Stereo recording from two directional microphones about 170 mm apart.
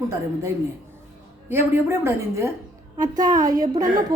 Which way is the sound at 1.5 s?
15° right (ahead or behind).